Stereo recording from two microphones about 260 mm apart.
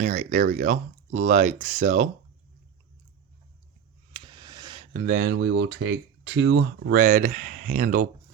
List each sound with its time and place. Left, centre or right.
0.0 s speech: right
4.1 s a sound: centre
4.9 s speech: right